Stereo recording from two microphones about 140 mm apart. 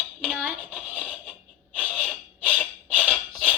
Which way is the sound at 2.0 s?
10° left (ahead or behind).